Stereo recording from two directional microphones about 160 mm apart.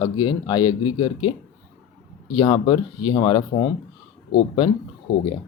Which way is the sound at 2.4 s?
30° left (ahead or behind).